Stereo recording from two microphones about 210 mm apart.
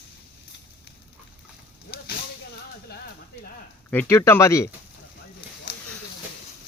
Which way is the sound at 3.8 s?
10° left (ahead or behind).